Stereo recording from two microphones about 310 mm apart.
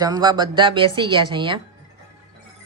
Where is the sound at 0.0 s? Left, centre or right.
Centre.